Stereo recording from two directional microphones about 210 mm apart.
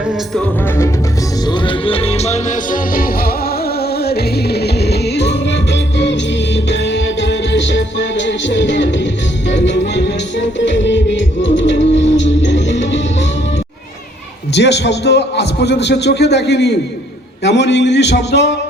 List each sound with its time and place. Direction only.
1.5 s music: 25° left (ahead or behind); by 13.0 s 60° left (ahead or behind)
14.5 s speech: 55° left (ahead or behind)